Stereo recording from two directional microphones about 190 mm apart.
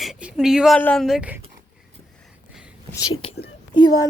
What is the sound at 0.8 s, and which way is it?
Speech, 5° left (ahead or behind).